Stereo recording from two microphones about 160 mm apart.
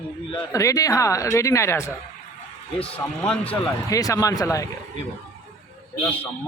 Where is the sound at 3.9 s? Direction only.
20° left (ahead or behind).